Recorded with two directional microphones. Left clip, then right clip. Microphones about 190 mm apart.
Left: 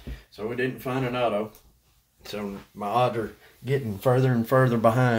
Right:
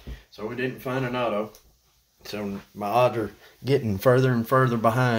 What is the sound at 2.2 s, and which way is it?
Speech, 20° right (ahead or behind).